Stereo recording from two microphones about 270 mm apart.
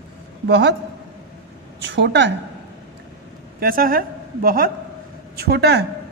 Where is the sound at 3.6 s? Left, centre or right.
Right.